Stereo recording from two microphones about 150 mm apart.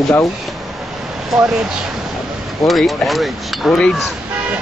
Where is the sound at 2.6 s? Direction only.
Centre (ahead or behind).